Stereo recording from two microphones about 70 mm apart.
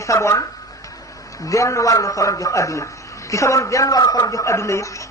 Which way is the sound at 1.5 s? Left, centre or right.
Left.